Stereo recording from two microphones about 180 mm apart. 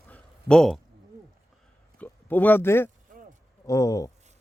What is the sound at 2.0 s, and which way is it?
Speech, 10° left (ahead or behind).